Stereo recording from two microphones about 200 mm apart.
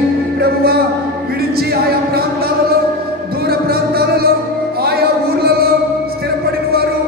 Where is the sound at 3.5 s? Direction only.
50° right (ahead or behind).